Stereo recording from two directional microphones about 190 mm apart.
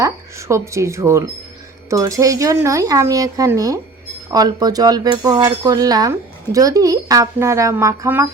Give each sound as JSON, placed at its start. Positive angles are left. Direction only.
{"t": 0.0, "sound": "speech", "side_deg": -15}